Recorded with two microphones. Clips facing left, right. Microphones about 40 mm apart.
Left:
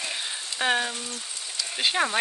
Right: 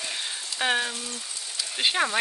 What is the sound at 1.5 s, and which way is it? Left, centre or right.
Speech, centre.